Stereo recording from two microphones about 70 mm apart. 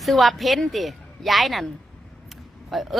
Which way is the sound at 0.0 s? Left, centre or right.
Centre.